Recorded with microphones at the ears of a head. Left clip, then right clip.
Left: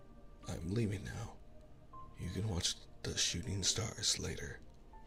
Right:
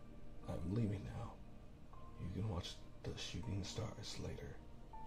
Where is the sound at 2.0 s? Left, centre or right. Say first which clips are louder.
Left 5 dB; left.